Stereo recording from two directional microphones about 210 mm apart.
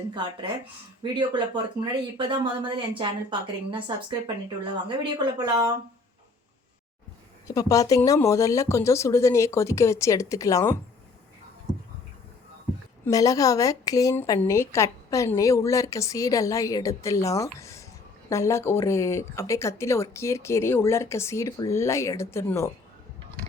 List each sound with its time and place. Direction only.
1.0 s speech: 20° right (ahead or behind)
7.4 s speech: 15° left (ahead or behind)
13.1 s speech: 15° left (ahead or behind)